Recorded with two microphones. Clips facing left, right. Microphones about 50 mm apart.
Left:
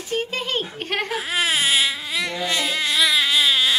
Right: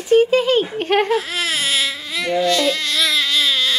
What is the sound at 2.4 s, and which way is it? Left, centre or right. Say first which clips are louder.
Baby cry: right 5 dB; centre.